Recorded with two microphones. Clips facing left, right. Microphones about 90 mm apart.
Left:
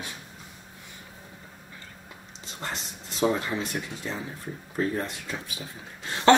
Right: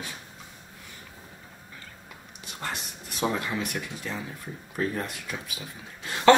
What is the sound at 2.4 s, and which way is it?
Speech, 25° left (ahead or behind).